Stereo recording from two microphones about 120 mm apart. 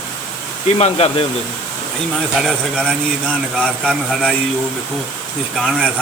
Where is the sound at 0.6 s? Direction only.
60° left (ahead or behind).